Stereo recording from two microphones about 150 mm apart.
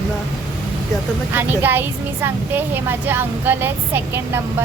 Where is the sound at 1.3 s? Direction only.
15° right (ahead or behind).